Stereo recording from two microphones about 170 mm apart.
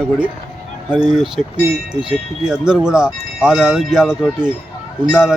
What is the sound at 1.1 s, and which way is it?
Speech, 5° right (ahead or behind).